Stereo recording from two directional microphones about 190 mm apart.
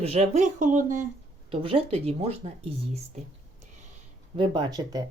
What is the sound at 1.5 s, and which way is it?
Speech, 30° right (ahead or behind).